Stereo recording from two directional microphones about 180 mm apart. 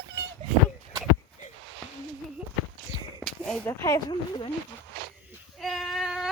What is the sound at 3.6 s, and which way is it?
Speech, 20° left (ahead or behind).